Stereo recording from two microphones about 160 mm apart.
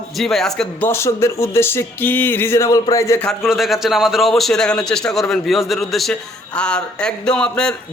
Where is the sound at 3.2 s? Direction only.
Centre (ahead or behind).